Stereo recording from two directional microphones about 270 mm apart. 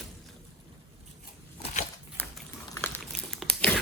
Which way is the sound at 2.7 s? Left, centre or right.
Centre.